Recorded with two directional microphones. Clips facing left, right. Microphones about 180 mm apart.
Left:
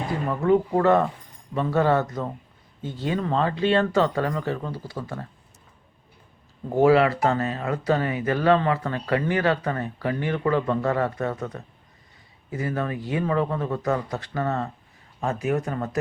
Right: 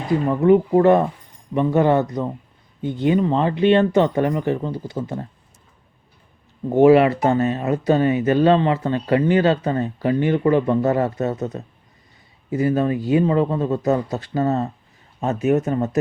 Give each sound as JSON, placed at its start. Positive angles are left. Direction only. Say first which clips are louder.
{"t": 0.3, "sound": "speech", "louder": "right 5 dB", "side_deg": -20}
{"t": 6.7, "sound": "speech", "louder": "right 5 dB", "side_deg": -25}